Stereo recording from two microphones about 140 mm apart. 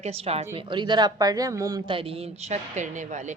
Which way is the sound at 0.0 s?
45° right (ahead or behind).